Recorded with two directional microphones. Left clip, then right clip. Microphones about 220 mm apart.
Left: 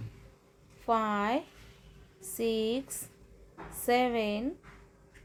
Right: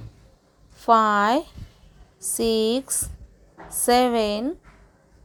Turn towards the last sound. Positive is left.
turn(degrees=-25)  # may be behind; listen again after turning